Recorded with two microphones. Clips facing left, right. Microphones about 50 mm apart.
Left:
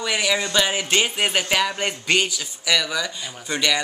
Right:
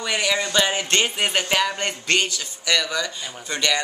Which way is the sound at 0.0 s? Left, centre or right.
Centre.